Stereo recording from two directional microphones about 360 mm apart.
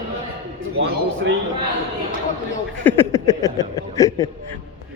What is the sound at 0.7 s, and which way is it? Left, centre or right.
Speech, right.